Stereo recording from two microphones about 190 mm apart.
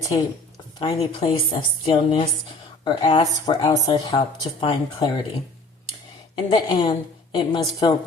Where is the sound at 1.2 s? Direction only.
30° left (ahead or behind).